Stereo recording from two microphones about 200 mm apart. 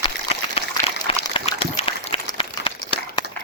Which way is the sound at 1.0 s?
25° left (ahead or behind).